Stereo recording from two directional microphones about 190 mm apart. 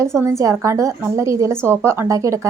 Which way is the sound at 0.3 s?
15° right (ahead or behind).